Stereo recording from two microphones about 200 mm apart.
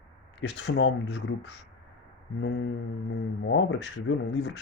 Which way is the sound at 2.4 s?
65° left (ahead or behind).